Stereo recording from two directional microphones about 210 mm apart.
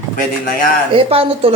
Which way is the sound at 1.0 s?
25° right (ahead or behind).